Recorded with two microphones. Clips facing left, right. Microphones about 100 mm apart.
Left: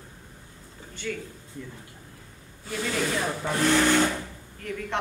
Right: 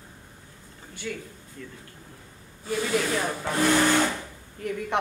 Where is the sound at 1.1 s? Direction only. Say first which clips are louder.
Left 1 dB; 15° right (ahead or behind).